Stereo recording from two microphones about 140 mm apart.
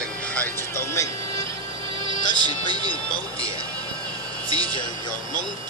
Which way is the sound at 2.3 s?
30° right (ahead or behind).